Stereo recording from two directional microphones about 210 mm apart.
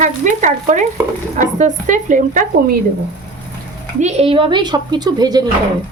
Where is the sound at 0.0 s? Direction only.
35° right (ahead or behind).